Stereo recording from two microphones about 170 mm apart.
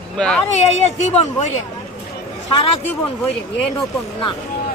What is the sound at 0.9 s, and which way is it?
Speech, 40° left (ahead or behind).